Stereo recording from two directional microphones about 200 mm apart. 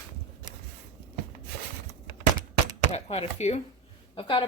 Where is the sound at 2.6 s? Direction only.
30° left (ahead or behind).